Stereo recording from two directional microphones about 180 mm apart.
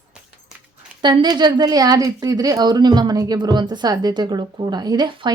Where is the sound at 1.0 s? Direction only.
25° right (ahead or behind).